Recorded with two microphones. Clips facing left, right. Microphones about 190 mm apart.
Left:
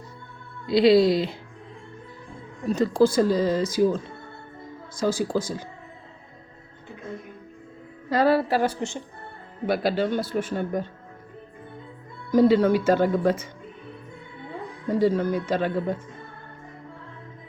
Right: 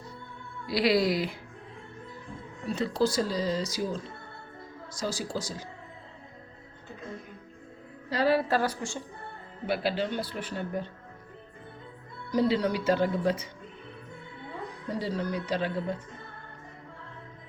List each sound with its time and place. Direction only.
0.7 s speech: 25° left (ahead or behind)
2.6 s speech: 45° left (ahead or behind)
8.1 s speech: 50° left (ahead or behind)
8.6 s speech: 25° left (ahead or behind)
9.6 s speech: 45° left (ahead or behind)
12.3 s speech: 50° left (ahead or behind)
14.8 s speech: 50° left (ahead or behind)